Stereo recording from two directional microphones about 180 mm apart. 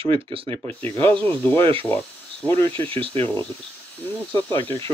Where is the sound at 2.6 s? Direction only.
30° right (ahead or behind).